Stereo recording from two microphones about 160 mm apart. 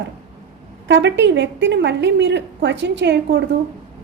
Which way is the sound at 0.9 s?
90° right.